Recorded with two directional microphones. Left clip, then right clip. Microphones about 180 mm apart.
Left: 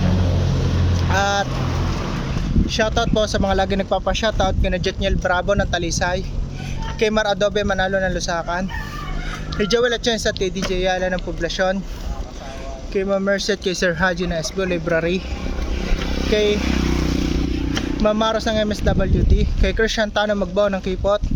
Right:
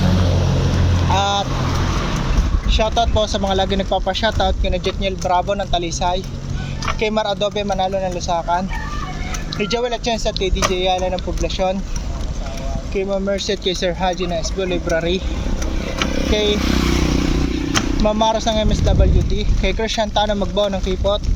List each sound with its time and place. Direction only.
0.0 s vehicle: 20° right (ahead or behind)
1.1 s boat: 40° left (ahead or behind)
2.6 s speech: 35° left (ahead or behind)
9.6 s speech: 40° left (ahead or behind)
12.9 s speech: 40° left (ahead or behind)
16.3 s speech: 35° left (ahead or behind)
18.0 s speech: 35° left (ahead or behind)